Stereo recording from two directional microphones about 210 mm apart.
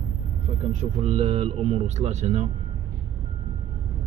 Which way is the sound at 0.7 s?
35° right (ahead or behind).